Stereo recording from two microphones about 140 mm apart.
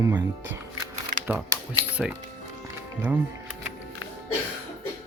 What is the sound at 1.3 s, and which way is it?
Speech, 10° right (ahead or behind).